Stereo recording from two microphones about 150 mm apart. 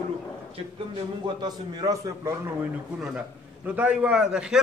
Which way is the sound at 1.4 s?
30° right (ahead or behind).